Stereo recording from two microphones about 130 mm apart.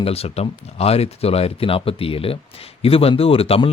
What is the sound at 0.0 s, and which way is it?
Speech, 50° left (ahead or behind).